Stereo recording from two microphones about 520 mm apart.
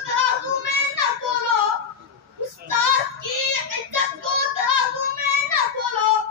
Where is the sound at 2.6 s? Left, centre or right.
Right.